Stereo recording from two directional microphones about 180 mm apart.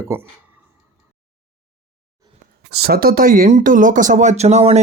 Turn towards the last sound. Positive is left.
turn(degrees=-40)  # may be behind; listen again after turning